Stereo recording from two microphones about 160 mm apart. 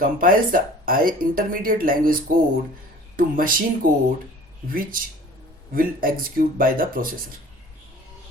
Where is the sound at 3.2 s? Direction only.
60° right (ahead or behind).